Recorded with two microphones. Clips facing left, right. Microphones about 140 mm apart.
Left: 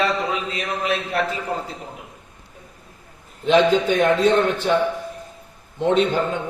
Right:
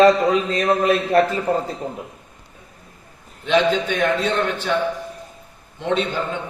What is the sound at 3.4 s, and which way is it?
A man's voice, 40° left (ahead or behind).